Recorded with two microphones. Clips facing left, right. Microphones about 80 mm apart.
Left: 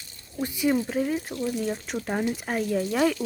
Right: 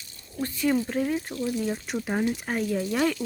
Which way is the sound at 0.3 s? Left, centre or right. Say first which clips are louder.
Left 1 dB; centre.